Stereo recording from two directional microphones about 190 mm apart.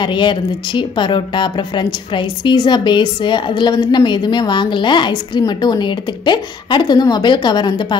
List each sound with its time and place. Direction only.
0.0 s speech: 25° left (ahead or behind)